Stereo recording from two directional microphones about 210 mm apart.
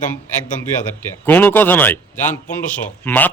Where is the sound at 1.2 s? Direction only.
10° left (ahead or behind).